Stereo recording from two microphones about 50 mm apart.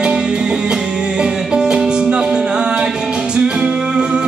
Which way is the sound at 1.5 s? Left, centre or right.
Centre.